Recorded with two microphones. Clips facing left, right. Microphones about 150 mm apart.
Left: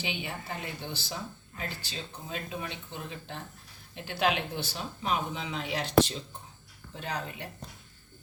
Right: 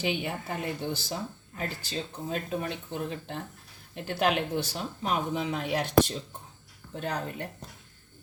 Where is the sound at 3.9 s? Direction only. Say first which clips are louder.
Right 2 dB; 45° right (ahead or behind).